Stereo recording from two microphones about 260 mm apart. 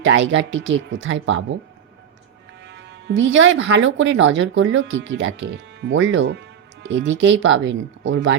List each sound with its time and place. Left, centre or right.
0.0 s speech: right
2.6 s speech: right